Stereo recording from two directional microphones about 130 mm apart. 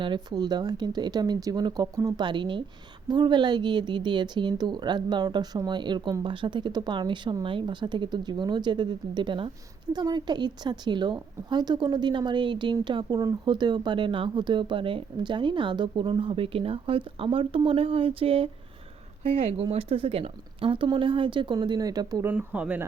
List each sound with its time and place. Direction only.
0.0 s a woman's voice: 35° right (ahead or behind)
22.3 s speech: 10° right (ahead or behind)